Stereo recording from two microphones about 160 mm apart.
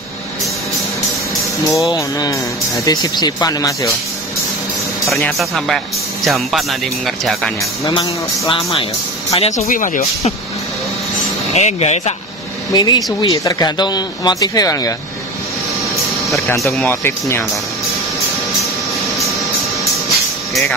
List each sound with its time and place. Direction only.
1.7 s speech: 20° left (ahead or behind)
5.1 s speech: centre (ahead or behind)
7.9 s speech: 30° left (ahead or behind)
9.7 s speech: 55° left (ahead or behind)
11.5 s speech: 45° left (ahead or behind)
12.7 s speech: 25° left (ahead or behind)
16.5 s speech: centre (ahead or behind)
16.8 s speech: 15° left (ahead or behind)